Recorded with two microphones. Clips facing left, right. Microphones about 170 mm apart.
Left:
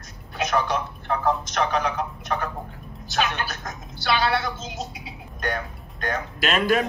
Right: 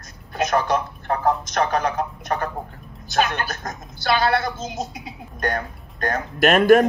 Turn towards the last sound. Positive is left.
turn(degrees=-50)  # may be behind; listen again after turning